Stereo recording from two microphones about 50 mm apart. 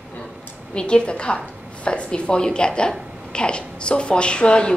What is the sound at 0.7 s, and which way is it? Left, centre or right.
A woman's voice, centre.